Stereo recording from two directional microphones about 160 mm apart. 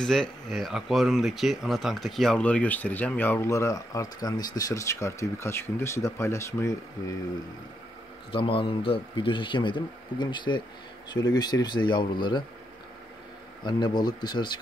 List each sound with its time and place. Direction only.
0.0 s speech: 5° left (ahead or behind); by 6.8 s 20° left (ahead or behind)
8.3 s speech: 35° left (ahead or behind)
13.7 s speech: 25° left (ahead or behind)